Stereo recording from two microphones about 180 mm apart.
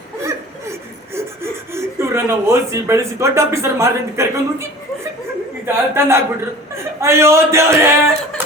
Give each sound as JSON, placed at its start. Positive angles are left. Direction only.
{"t": 1.1, "sound": "speech", "side_deg": -15}
{"t": 5.6, "sound": "a man's voice", "side_deg": -15}